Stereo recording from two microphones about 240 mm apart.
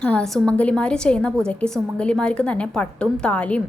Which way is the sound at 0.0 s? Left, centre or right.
Centre.